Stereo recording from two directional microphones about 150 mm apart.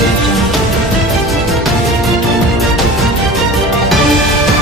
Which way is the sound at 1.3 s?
Centre (ahead or behind).